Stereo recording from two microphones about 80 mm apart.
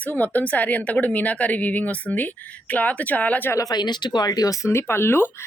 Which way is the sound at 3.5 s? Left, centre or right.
Left.